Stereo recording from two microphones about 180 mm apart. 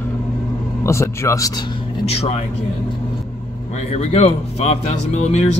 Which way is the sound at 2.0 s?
35° left (ahead or behind).